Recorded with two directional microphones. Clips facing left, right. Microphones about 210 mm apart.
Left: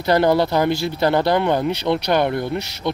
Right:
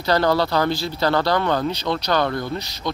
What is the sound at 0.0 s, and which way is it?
Speech, 20° left (ahead or behind).